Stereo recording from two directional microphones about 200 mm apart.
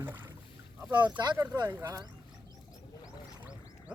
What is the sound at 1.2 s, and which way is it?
Speech, 20° right (ahead or behind).